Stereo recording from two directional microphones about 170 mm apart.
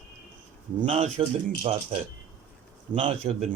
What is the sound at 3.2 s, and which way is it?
Speech, 25° right (ahead or behind).